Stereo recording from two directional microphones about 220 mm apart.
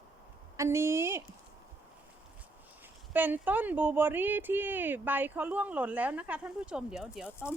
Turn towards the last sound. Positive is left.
turn(degrees=-5)  # may be behind; listen again after turning